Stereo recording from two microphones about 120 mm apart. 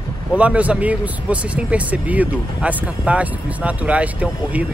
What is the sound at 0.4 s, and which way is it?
Speech, 10° right (ahead or behind).